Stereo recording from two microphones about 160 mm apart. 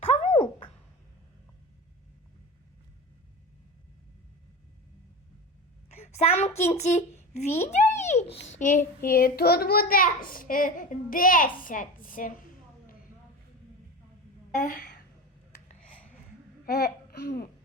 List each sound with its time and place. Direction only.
0.0 s a sound: 45° left (ahead or behind)
5.9 s a child's voice: 45° left (ahead or behind); by 12.5 s 60° left (ahead or behind)
14.5 s a child's voice: 55° left (ahead or behind)
16.6 s babbling: 75° left (ahead or behind)
17.2 s a child's voice: 65° left (ahead or behind)